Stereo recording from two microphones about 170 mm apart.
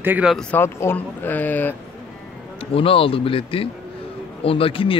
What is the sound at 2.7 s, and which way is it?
Speech, 35° left (ahead or behind).